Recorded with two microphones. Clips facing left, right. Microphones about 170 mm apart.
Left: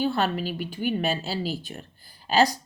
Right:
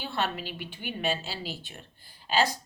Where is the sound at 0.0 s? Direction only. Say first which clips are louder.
Left 7 dB; 40° left (ahead or behind).